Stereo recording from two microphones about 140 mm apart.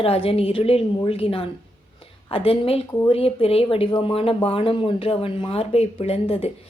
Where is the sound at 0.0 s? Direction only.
45° left (ahead or behind).